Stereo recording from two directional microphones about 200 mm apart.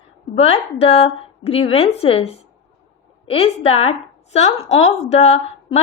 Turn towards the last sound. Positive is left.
turn(degrees=30)  # may be behind; listen again after turning